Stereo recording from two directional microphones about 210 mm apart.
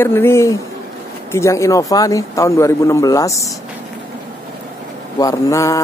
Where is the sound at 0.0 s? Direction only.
10° left (ahead or behind).